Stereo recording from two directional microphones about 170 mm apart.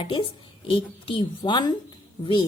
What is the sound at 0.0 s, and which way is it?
A woman's voice, 30° left (ahead or behind).